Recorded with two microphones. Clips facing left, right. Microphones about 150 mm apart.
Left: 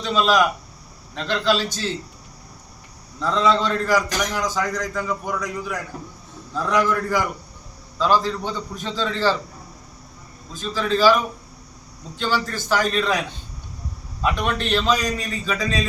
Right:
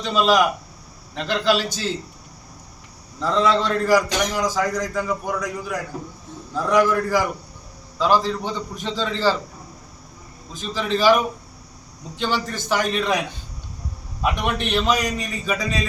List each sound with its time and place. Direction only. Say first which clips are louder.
0.0 s a man's voice: right 1 dB; 10° right (ahead or behind)
3.2 s a man's voice: even; 10° right (ahead or behind)
10.5 s a man's voice: left 1 dB; 20° right (ahead or behind)